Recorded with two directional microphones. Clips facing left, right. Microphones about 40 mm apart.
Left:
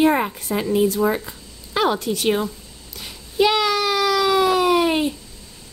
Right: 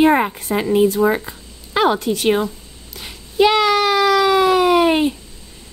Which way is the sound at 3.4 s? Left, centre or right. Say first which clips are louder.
Right 4 dB; right.